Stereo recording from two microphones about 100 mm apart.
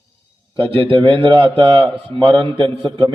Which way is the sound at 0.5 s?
60° right (ahead or behind).